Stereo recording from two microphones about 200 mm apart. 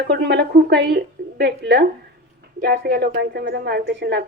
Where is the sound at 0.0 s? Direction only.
55° right (ahead or behind).